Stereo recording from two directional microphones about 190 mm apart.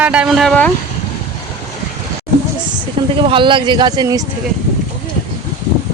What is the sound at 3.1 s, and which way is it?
Speech, 25° right (ahead or behind).